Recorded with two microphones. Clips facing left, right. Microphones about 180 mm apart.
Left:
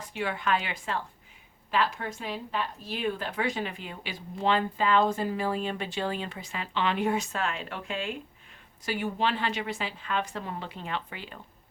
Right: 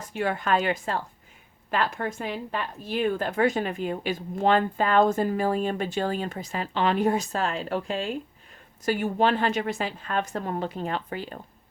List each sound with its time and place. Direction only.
0.0 s speech: 45° right (ahead or behind)